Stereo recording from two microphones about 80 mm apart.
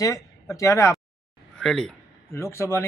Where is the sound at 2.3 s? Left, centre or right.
Left.